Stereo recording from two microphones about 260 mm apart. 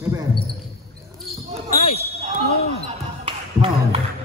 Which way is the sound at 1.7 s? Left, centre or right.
Left.